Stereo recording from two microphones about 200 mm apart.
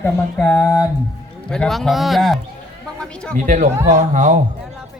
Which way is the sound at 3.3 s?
40° right (ahead or behind).